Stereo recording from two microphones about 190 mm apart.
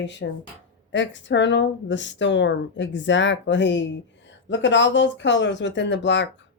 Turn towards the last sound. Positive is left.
turn(degrees=70)  # may be behind; listen again after turning